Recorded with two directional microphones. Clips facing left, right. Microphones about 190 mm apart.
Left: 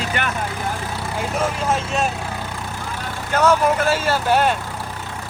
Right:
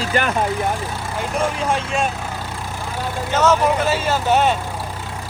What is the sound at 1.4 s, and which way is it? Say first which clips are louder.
Speech: right 1 dB; 5° left (ahead or behind).